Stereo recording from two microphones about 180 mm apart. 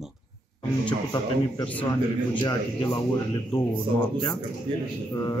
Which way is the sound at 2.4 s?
25° left (ahead or behind).